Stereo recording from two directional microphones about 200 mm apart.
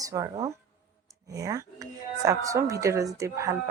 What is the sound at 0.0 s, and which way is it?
Speech, 15° right (ahead or behind).